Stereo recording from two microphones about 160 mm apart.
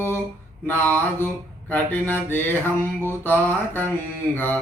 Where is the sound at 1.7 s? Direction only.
10° left (ahead or behind).